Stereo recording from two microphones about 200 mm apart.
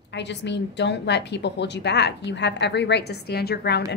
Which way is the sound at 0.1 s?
60° left (ahead or behind).